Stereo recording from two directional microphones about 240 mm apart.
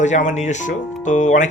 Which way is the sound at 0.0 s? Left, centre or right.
Left.